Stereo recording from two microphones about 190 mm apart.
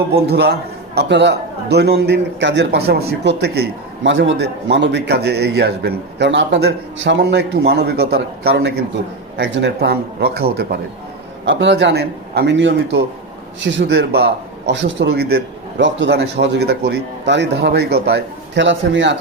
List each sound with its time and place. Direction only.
0.1 s a man's voice: 60° right (ahead or behind)
11.4 s a man's voice: 65° right (ahead or behind)